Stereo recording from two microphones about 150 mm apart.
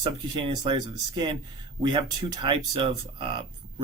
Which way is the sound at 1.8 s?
30° right (ahead or behind).